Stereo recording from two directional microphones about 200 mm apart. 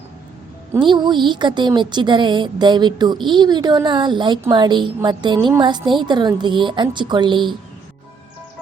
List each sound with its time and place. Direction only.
0.7 s a woman's voice: 25° right (ahead or behind)